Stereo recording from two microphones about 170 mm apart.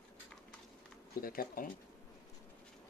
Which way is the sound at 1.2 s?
60° left (ahead or behind).